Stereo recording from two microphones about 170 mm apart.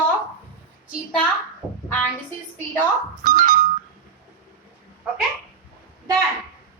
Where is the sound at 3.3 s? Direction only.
50° right (ahead or behind).